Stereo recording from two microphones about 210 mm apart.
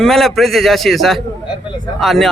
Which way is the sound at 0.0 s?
Centre (ahead or behind).